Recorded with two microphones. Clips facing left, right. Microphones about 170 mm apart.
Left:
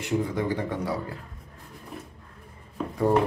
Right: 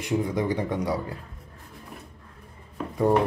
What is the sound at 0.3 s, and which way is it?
Speech, 15° right (ahead or behind).